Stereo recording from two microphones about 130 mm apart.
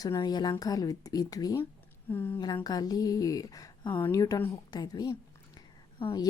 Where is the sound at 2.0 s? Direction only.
15° left (ahead or behind).